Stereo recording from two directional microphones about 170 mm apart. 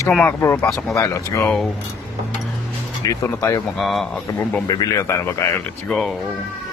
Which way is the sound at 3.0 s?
20° left (ahead or behind).